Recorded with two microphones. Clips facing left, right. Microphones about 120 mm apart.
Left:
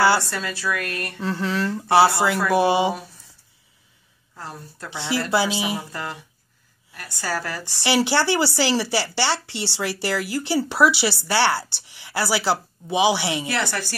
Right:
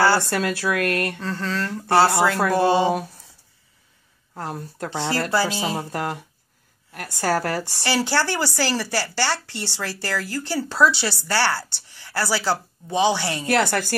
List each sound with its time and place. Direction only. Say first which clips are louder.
0.3 s a woman's voice: right 4 dB; 55° right (ahead or behind)
1.2 s speech: left 3 dB; 15° left (ahead or behind)
4.4 s a woman's voice: right 6 dB; 55° right (ahead or behind)
5.3 s speech: left 3 dB; 15° left (ahead or behind)
5.8 s a woman's voice: right 5 dB; 55° right (ahead or behind)
7.8 s a man's voice: left 3 dB; 15° left (ahead or behind)
13.5 s a woman's voice: right 5 dB; 50° right (ahead or behind)